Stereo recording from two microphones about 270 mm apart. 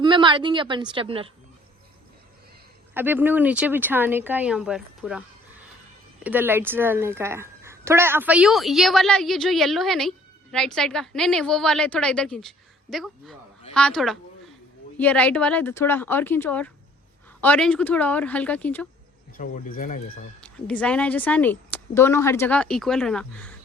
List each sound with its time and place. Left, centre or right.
0.0 s speech: centre
2.9 s speech: centre
6.2 s speech: centre
19.4 s speech: left
20.4 s speech: centre